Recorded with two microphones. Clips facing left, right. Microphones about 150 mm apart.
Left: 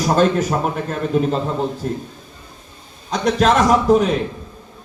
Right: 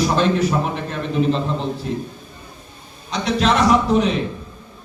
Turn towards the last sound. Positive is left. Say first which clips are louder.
# left 2 dB
turn(degrees=45)  # may be behind; listen again after turning